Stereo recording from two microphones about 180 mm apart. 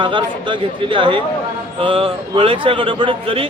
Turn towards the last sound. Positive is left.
turn(degrees=-30)  # may be behind; listen again after turning